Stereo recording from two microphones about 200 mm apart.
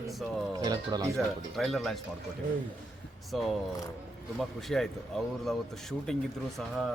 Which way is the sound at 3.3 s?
Centre (ahead or behind).